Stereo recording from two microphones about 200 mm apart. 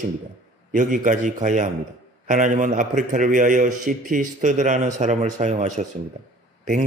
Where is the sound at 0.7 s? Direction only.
40° right (ahead or behind).